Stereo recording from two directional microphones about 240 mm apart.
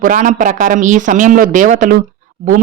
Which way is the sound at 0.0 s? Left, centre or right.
Right.